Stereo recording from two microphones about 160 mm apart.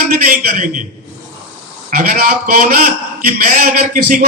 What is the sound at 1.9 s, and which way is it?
A man's voice, 65° right (ahead or behind).